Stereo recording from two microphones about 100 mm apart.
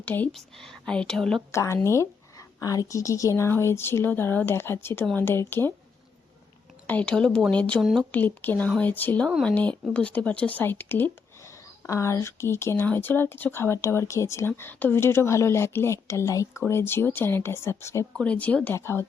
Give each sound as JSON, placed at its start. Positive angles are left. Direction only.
{"t": 0.0, "sound": "speech", "side_deg": 20}
{"t": 0.3, "sound": "speech", "side_deg": 5}
{"t": 1.5, "sound": "speech", "side_deg": 30}
{"t": 6.8, "sound": "speech", "side_deg": 15}
{"t": 7.8, "sound": "speech", "side_deg": 0}
{"t": 8.1, "sound": "speech", "side_deg": 20}
{"t": 11.9, "sound": "speech", "side_deg": 30}
{"t": 18.2, "sound": "speech", "side_deg": 15}
{"t": 18.8, "sound": "speech", "side_deg": 25}